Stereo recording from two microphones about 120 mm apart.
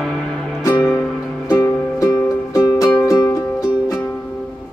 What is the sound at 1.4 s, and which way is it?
Music, 30° left (ahead or behind).